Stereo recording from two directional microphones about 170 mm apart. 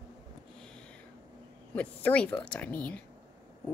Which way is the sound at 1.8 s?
10° left (ahead or behind).